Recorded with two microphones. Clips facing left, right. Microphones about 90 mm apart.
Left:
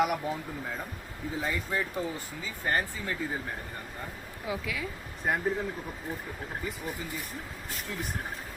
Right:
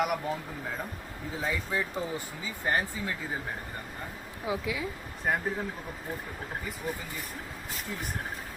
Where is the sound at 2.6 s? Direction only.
10° right (ahead or behind).